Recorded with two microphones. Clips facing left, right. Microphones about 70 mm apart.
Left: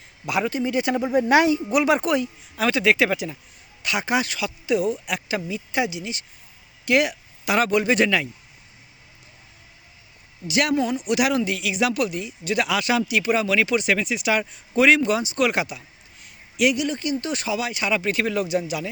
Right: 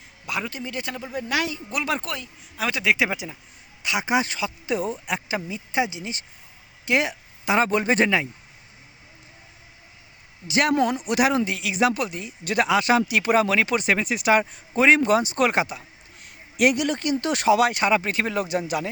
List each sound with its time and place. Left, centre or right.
0.3 s a man's voice: centre
0.9 s speech: left
1.7 s a man's voice: centre
2.6 s speech: centre; by 8.3 s right
10.5 s speech: right
10.8 s speech: right
15.0 s speech: right
16.2 s speech: right
18.4 s speech: right